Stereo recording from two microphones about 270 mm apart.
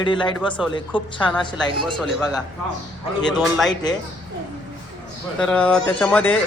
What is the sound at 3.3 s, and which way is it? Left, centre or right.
Speech, centre.